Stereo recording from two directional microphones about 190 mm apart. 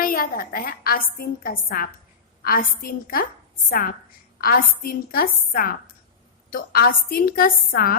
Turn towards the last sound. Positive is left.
turn(degrees=50)  # may be behind; listen again after turning